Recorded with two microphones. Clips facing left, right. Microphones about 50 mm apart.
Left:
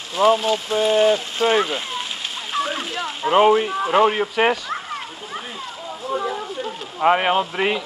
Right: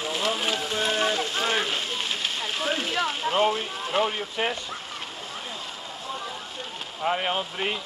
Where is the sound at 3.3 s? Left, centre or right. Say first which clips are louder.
Left 11 dB; left.